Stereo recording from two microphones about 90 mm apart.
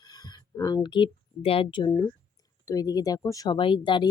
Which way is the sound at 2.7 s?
45° left (ahead or behind).